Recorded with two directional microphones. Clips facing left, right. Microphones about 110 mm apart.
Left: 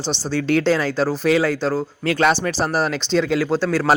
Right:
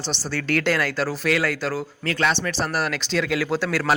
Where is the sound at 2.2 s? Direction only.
40° left (ahead or behind); by 3.8 s 15° left (ahead or behind).